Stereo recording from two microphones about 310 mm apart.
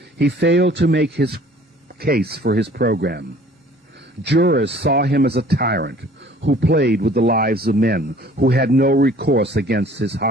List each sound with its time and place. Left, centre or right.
0.2 s speech: right